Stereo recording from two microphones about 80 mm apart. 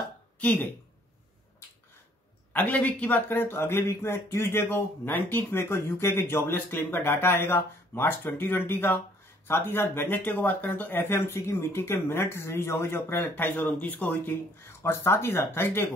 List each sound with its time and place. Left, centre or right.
0.4 s speech: left
2.5 s speech: centre